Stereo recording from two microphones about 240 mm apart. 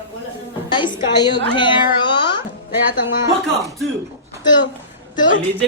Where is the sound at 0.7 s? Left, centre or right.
Centre.